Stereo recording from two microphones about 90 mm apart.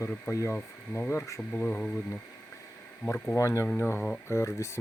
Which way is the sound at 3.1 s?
35° left (ahead or behind).